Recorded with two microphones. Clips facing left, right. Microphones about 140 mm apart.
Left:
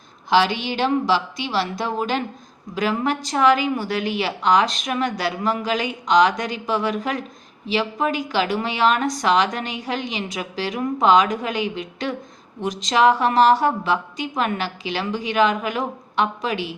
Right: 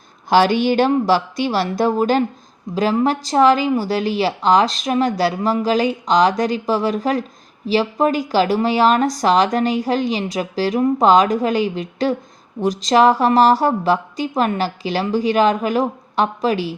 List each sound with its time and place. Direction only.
0.3 s a woman's voice: 45° right (ahead or behind)